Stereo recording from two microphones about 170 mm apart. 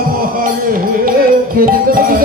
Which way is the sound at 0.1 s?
55° right (ahead or behind).